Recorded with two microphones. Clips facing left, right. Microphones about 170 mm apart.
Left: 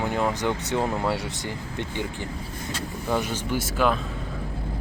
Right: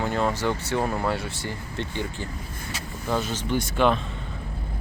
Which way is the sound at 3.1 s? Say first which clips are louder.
Even; 15° left (ahead or behind).